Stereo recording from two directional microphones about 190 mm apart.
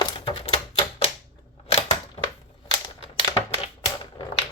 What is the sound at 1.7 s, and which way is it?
Camera, 35° left (ahead or behind).